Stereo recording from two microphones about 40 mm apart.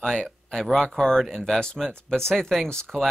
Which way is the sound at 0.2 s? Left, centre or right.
Centre.